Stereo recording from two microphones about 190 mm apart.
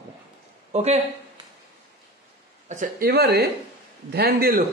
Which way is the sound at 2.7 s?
45° right (ahead or behind).